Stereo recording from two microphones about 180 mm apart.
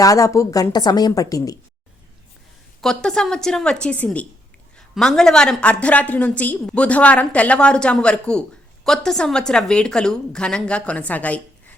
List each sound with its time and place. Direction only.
0.0 s a woman's voice: 20° left (ahead or behind)
2.8 s a woman's voice: 5° left (ahead or behind)